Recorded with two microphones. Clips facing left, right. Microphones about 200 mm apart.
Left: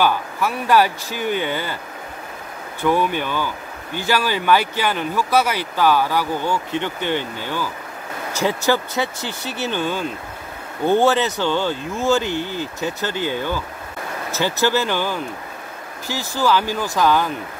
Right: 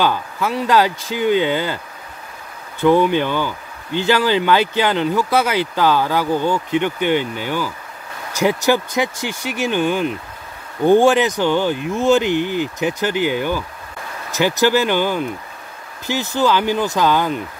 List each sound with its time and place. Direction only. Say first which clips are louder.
0.0 s speech: even; 20° right (ahead or behind)
2.8 s speech: right 5 dB; 20° right (ahead or behind)